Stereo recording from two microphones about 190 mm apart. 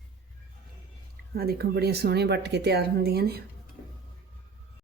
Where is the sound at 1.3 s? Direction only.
55° right (ahead or behind).